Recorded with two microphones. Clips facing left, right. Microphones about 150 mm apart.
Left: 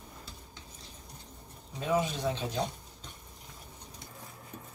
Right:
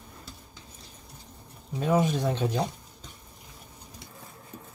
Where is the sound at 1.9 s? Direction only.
55° right (ahead or behind).